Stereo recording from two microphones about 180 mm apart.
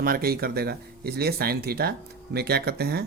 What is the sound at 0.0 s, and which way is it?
Speech, 55° right (ahead or behind).